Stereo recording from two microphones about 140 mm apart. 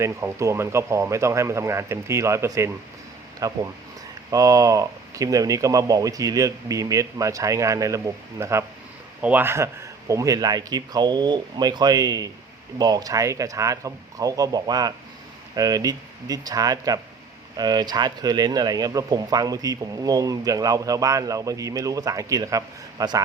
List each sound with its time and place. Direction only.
0.0 s speech: 20° right (ahead or behind)